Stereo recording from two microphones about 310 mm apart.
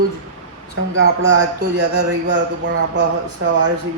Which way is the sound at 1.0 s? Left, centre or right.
Right.